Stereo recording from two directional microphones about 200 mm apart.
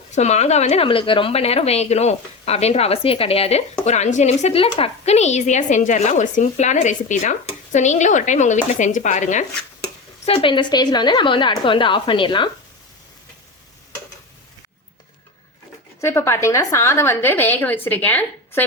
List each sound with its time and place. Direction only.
0.1 s a woman's voice: 35° left (ahead or behind)
16.0 s a woman's voice: 10° left (ahead or behind)